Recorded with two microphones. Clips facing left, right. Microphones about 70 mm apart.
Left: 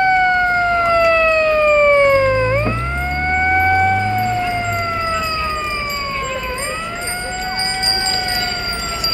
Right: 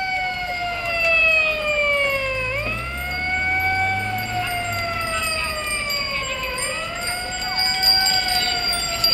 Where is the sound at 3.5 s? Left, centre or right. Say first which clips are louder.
Left 8 dB; left.